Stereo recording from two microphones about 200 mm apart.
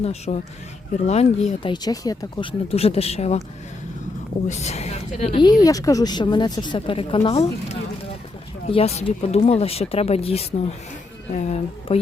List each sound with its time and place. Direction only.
0.0 s a woman's voice: 30° left (ahead or behind)
4.4 s speech: 35° left (ahead or behind)
5.4 s a woman's voice: 20° left (ahead or behind); by 11.9 s 35° left (ahead or behind)